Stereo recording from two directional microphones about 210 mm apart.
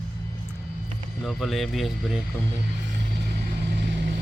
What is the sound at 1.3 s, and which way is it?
Speech, centre (ahead or behind).